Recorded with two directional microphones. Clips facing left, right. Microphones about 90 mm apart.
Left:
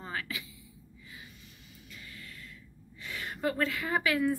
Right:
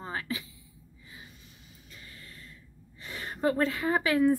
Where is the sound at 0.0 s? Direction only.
30° right (ahead or behind).